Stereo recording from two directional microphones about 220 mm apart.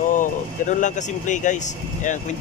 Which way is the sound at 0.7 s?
35° left (ahead or behind).